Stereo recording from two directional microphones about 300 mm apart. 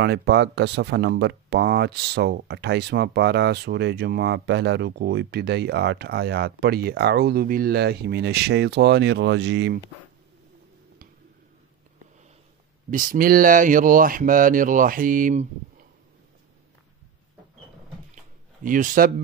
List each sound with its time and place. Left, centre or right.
0.0 s speech: right
12.9 s speech: right
18.1 s a sound: right